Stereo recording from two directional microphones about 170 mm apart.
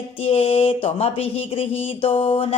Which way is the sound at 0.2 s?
35° left (ahead or behind).